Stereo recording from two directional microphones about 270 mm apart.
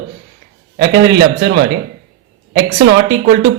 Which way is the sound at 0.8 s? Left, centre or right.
Right.